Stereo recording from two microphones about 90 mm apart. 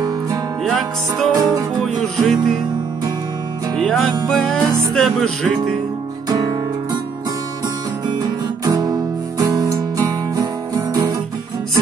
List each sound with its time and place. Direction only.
0.7 s music: 5° left (ahead or behind)
1.3 s music: 40° right (ahead or behind)
1.8 s music: 5° left (ahead or behind)
3.7 s music: 5° left (ahead or behind)
6.2 s music: 45° right (ahead or behind)
8.6 s music: 45° right (ahead or behind)